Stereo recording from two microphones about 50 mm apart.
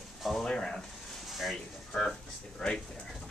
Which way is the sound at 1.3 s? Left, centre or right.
Centre.